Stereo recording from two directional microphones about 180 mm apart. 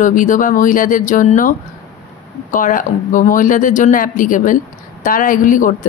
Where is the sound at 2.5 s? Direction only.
50° left (ahead or behind).